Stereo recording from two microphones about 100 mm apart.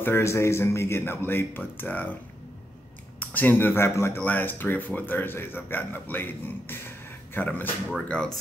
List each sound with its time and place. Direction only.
0.0 s a man's voice: 25° left (ahead or behind)
3.2 s a man's voice: 20° left (ahead or behind)